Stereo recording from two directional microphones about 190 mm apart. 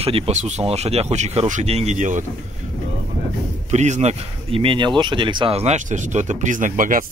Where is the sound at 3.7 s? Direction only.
35° right (ahead or behind).